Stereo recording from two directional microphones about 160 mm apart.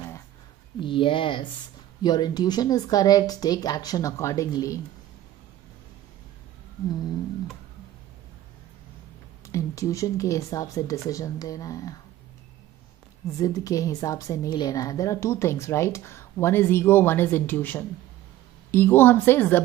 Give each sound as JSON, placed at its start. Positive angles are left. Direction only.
{"t": 0.7, "sound": "a woman's voice", "side_deg": 30}
{"t": 9.5, "sound": "a woman's voice", "side_deg": 20}
{"t": 13.4, "sound": "a woman's voice", "side_deg": 20}